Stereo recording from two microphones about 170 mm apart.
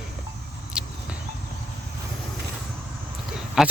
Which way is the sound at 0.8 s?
5° right (ahead or behind).